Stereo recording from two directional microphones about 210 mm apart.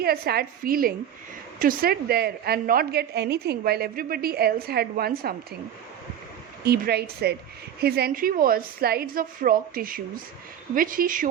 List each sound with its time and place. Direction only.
0.0 s a woman's voice: 45° right (ahead or behind)
6.7 s a woman's voice: 50° right (ahead or behind)